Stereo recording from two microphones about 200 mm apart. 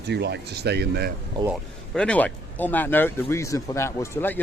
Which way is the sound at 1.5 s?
Centre (ahead or behind).